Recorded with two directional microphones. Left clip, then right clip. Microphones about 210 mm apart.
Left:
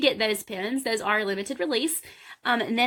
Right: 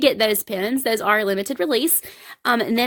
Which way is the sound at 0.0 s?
55° right (ahead or behind).